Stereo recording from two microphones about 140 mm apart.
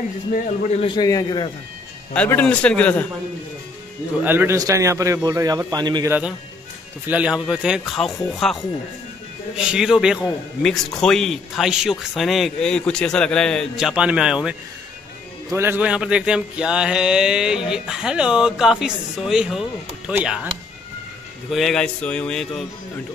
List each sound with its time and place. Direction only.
0.7 s a man's voice: 45° left (ahead or behind)
0.9 s a man's voice: 25° left (ahead or behind)
2.1 s a man's voice: 10° left (ahead or behind)
4.2 s speech: 15° right (ahead or behind)
6.0 s speech: 15° right (ahead or behind)
8.3 s mantra: centre (ahead or behind)
9.6 s mantra: 5° right (ahead or behind)
20.1 s speech: 5° right (ahead or behind)
21.5 s mantra: centre (ahead or behind)